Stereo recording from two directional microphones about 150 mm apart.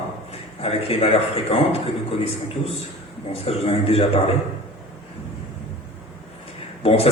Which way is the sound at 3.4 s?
40° left (ahead or behind).